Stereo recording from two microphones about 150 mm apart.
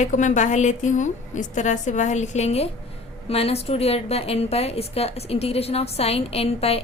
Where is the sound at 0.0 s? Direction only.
55° left (ahead or behind).